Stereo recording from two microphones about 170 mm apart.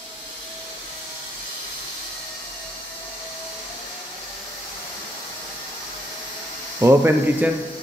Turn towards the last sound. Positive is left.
turn(degrees=-10)  # may be behind; listen again after turning